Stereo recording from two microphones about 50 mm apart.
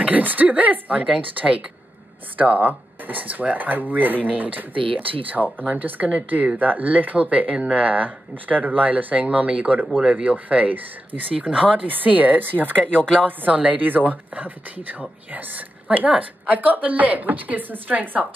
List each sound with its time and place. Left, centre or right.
0.0 s speech: right
2.3 s speech: right
12.7 s speech: left
13.2 s speech: right